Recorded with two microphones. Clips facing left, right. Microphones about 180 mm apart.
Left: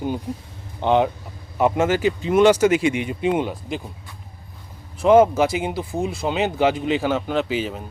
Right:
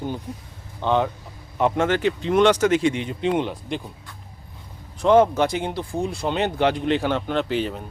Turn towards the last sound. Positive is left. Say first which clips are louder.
# left 1 dB
turn(degrees=5)  # may be behind; listen again after turning